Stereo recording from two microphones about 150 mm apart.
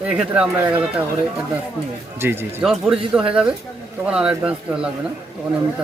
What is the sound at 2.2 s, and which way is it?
Speech, 15° right (ahead or behind).